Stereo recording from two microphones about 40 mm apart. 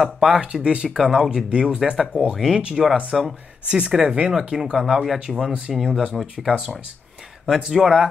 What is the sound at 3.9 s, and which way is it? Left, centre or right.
Speech, centre.